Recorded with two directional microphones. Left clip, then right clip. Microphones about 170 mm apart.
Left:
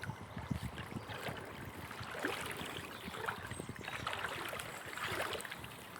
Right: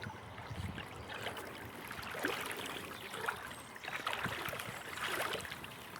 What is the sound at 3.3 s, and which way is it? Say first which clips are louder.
Boat: right 2 dB; 15° left (ahead or behind).